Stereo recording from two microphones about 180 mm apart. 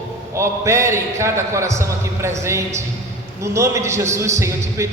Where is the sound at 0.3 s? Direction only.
15° right (ahead or behind).